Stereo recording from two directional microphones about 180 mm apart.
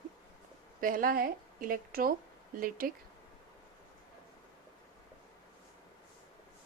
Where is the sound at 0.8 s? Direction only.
50° right (ahead or behind).